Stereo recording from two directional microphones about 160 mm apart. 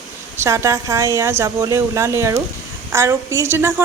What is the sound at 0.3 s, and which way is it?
A woman's voice, 20° right (ahead or behind).